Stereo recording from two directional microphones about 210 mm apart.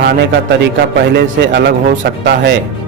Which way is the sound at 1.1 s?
50° right (ahead or behind).